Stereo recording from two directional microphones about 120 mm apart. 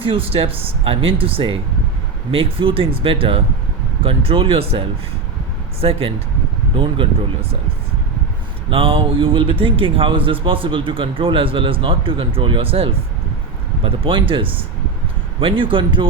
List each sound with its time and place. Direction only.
0.0 s speech: 50° right (ahead or behind)
8.7 s speech: 50° right (ahead or behind)